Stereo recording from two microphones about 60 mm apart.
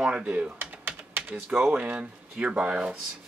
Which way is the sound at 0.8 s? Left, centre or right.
Right.